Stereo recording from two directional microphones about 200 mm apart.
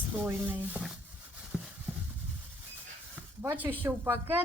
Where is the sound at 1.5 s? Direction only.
5° right (ahead or behind).